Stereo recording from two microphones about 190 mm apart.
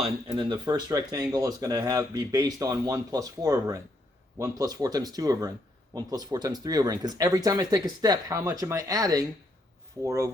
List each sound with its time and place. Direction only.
0.0 s speech: 30° right (ahead or behind)